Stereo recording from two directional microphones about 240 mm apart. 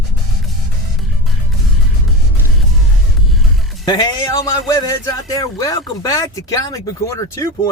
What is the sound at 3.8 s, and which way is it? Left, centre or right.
A man's voice, centre.